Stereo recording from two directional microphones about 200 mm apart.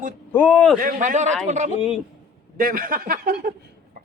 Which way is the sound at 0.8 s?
40° right (ahead or behind).